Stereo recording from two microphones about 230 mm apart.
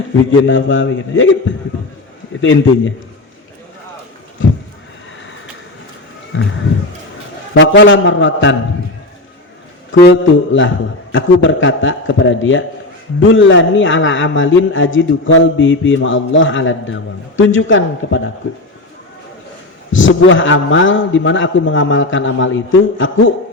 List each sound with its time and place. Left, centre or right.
0.4 s a man's voice: left
6.3 s speech: left
7.5 s a man's voice: left
9.9 s a man's voice: left
11.1 s a man's voice: left
19.9 s a man's voice: left